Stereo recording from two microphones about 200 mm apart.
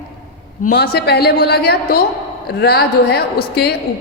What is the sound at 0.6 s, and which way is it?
A woman's voice, 50° left (ahead or behind).